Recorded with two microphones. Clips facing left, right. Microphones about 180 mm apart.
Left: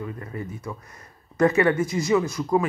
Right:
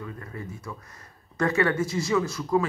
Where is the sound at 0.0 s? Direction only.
20° left (ahead or behind).